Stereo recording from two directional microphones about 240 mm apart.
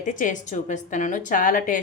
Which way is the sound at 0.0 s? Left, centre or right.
Left.